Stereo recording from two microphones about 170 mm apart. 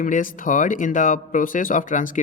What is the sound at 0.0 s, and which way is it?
Speech, 50° left (ahead or behind).